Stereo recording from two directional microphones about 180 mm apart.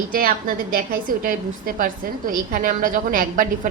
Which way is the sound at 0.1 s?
50° right (ahead or behind).